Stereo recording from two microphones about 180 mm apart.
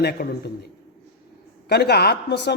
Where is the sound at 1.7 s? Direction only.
65° left (ahead or behind).